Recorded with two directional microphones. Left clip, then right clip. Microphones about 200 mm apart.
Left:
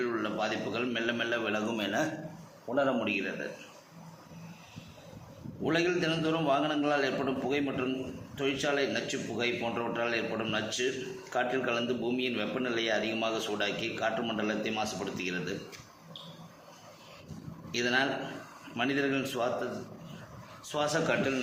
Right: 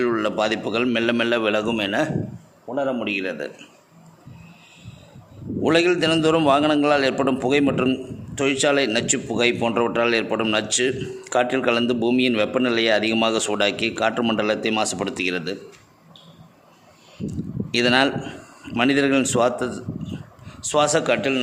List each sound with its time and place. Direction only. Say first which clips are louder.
0.0 s a man's voice: right 11 dB; 55° right (ahead or behind)
2.7 s a man's voice: right 4 dB; 25° right (ahead or behind)
3.0 s a man's voice: right 7 dB; 50° right (ahead or behind)
5.6 s a man's voice: right 11 dB; 55° right (ahead or behind)
17.7 s a man's voice: right 11 dB; 55° right (ahead or behind)